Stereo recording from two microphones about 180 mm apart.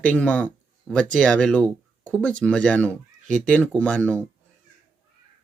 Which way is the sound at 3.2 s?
45° right (ahead or behind).